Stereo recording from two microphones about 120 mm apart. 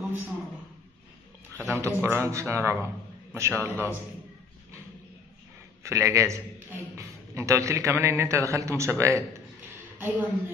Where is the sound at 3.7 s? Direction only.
15° left (ahead or behind).